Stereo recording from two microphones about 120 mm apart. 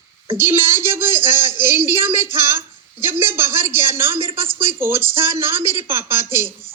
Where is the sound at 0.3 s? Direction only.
20° right (ahead or behind).